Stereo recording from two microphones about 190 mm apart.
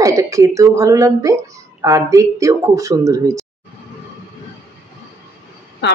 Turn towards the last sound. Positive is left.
turn(degrees=65)  # may be behind; listen again after turning